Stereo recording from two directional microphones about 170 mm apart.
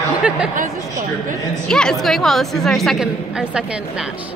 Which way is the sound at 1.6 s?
5° left (ahead or behind).